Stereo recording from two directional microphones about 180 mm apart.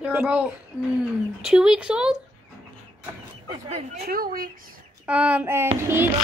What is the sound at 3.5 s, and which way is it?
Speech, 35° right (ahead or behind).